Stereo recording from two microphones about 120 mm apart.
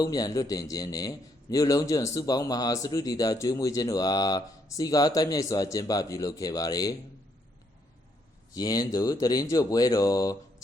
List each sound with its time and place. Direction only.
0.0 s a man's voice: 30° left (ahead or behind)
8.5 s speech: 30° left (ahead or behind)